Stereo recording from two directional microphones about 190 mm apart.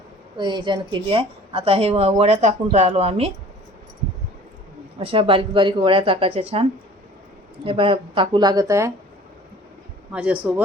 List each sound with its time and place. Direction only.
0.3 s a woman's voice: 25° right (ahead or behind)
4.9 s speech: 30° right (ahead or behind)
10.1 s speech: 5° right (ahead or behind)